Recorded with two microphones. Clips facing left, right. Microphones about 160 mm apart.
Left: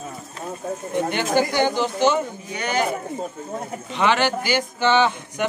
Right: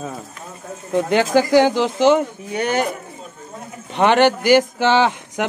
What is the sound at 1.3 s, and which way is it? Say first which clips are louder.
Speech: right 5 dB; 90° right.